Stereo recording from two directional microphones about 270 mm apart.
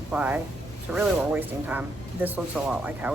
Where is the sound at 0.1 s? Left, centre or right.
Centre.